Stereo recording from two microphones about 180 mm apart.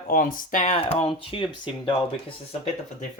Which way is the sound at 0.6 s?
30° left (ahead or behind).